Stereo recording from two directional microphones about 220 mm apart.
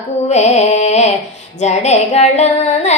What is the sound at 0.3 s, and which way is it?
Carnatic music, 30° left (ahead or behind).